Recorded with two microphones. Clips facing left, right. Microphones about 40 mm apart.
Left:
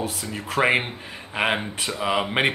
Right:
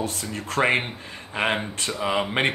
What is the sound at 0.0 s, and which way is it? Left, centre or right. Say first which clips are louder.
Speech: even; centre.